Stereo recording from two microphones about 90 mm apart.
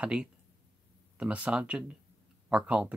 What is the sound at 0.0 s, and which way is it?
Speech, 10° right (ahead or behind).